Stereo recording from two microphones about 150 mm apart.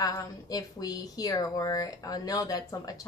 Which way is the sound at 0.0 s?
25° left (ahead or behind).